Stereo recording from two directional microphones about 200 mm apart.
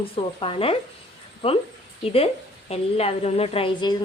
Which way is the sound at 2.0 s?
30° left (ahead or behind).